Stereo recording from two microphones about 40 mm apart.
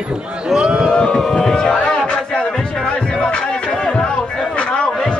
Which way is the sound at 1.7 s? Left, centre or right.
Left.